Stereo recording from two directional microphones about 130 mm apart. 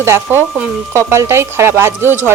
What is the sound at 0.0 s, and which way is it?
Speech, 20° right (ahead or behind).